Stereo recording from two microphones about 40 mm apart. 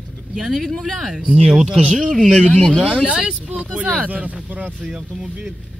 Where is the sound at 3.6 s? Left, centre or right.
Right.